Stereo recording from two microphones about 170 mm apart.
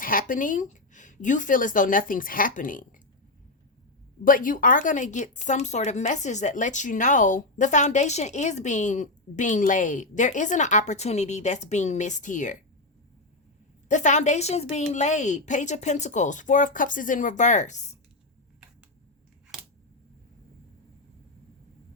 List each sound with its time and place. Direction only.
0.0 s speech: 55° left (ahead or behind)
4.2 s speech: 55° left (ahead or behind)
13.8 s a woman's voice: 45° left (ahead or behind)